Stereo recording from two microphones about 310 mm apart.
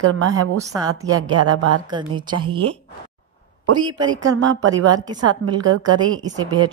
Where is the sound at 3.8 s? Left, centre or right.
Centre.